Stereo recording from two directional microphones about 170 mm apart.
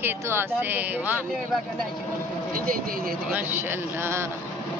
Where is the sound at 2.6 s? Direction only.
60° right (ahead or behind).